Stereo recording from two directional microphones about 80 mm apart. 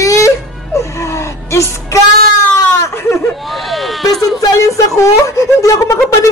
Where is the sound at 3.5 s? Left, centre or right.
Centre.